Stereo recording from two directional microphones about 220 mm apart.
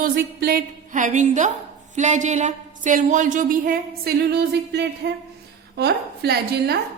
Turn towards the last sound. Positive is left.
turn(degrees=-50)  # may be behind; listen again after turning